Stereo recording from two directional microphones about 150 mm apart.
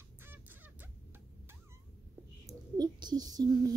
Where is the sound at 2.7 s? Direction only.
25° right (ahead or behind).